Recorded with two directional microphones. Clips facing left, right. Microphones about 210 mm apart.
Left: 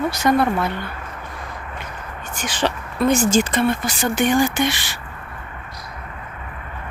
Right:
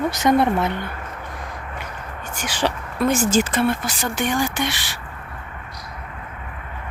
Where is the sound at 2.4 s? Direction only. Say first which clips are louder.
Left 1 dB; 10° right (ahead or behind).